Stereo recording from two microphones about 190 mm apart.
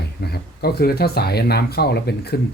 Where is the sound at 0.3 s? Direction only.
55° left (ahead or behind).